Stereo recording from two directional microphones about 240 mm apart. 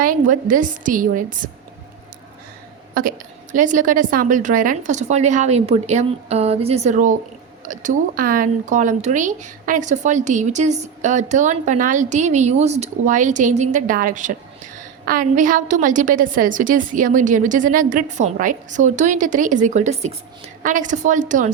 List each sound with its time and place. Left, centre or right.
0.0 s speech: right
2.9 s speech: right